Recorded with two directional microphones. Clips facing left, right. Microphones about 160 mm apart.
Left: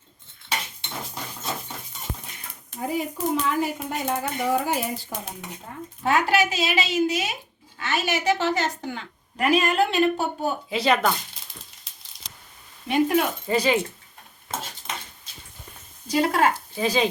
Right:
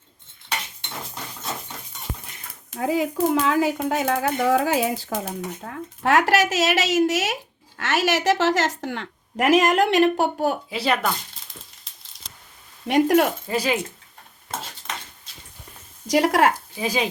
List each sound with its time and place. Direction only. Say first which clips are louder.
2.7 s a woman's voice: right 5 dB; 90° right
10.7 s speech: left 2 dB; 5° right (ahead or behind)
12.9 s speech: right 4 dB; 80° right
13.5 s speech: left 2 dB; 5° right (ahead or behind)
16.0 s speech: right 3 dB; 80° right
16.7 s speech: left 2 dB; 10° right (ahead or behind)